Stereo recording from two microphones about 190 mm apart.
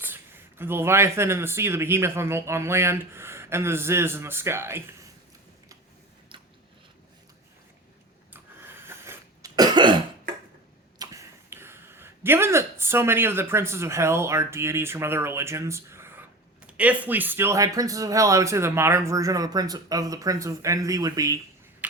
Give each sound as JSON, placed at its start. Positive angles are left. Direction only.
{"t": 0.0, "sound": "speech", "side_deg": -10}
{"t": 8.3, "sound": "cough", "side_deg": -10}
{"t": 10.9, "sound": "speech", "side_deg": -20}